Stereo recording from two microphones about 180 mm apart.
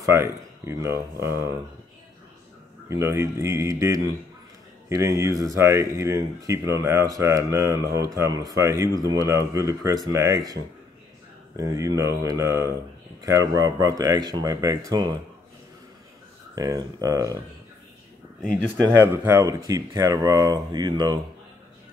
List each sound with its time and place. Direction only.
0.0 s speech: 15° right (ahead or behind)
2.9 s speech: 15° right (ahead or behind)
16.5 s speech: 20° right (ahead or behind)
18.9 s speech: 15° right (ahead or behind)